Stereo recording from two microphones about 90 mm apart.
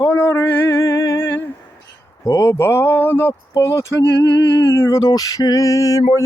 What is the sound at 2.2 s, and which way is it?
Mantra, 35° left (ahead or behind).